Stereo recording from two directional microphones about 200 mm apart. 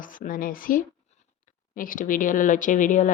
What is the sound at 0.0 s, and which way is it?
A woman's voice, 45° left (ahead or behind).